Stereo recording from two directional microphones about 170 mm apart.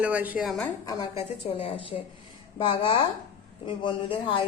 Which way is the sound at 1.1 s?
35° left (ahead or behind).